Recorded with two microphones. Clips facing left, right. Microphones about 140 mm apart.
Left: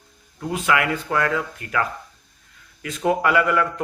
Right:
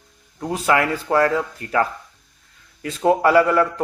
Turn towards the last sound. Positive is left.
turn(degrees=-30)  # may be behind; listen again after turning